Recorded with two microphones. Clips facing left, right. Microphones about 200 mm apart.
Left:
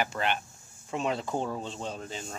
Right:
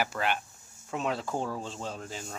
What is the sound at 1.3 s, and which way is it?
Speech, 20° left (ahead or behind).